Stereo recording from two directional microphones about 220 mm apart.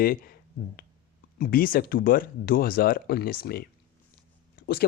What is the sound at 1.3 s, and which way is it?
Speech, 40° left (ahead or behind).